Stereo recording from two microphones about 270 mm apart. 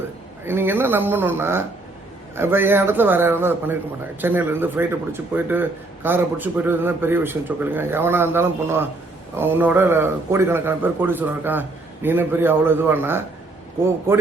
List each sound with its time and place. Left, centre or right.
0.4 s speech: centre